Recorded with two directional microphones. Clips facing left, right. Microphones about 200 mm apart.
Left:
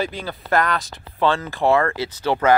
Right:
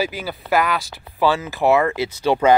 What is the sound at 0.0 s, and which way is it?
Speech, 5° right (ahead or behind).